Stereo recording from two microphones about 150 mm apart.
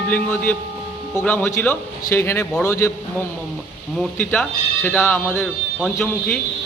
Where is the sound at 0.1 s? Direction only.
10° left (ahead or behind).